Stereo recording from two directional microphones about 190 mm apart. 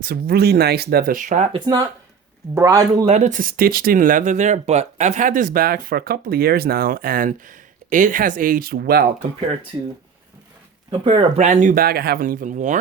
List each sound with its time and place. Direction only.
0.0 s speech: 55° right (ahead or behind)
1.5 s a man's voice: 20° right (ahead or behind)
3.1 s speech: 40° right (ahead or behind); by 9.0 s 55° right (ahead or behind)
11.0 s speech: 30° right (ahead or behind)